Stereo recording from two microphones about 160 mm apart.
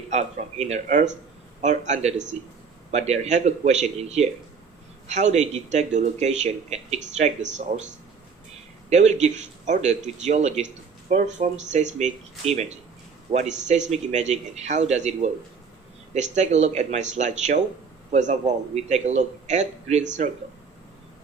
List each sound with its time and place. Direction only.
0.1 s speech: 45° right (ahead or behind)
8.9 s speech: 45° right (ahead or behind)